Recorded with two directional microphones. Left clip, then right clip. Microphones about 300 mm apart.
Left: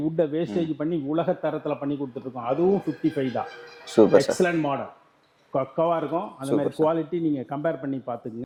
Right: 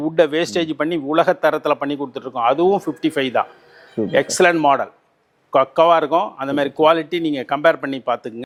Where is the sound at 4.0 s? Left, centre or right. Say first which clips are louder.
Left 7 dB; centre.